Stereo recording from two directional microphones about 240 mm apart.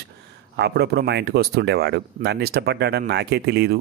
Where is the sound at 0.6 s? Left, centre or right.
Right.